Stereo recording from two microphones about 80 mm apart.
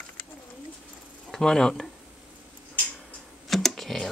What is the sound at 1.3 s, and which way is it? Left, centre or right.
Speech, centre.